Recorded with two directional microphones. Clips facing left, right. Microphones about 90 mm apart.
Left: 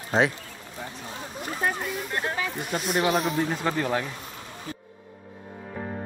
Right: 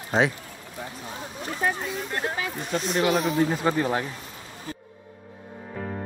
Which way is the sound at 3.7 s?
15° right (ahead or behind).